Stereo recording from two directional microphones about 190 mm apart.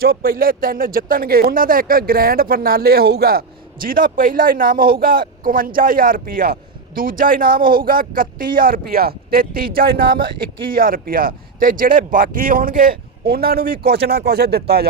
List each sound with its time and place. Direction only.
0.0 s speech: 50° right (ahead or behind)